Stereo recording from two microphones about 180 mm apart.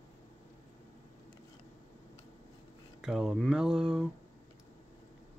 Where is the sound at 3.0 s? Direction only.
5° right (ahead or behind).